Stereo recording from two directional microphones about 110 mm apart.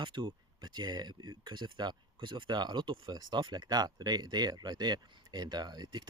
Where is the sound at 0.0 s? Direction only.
45° right (ahead or behind).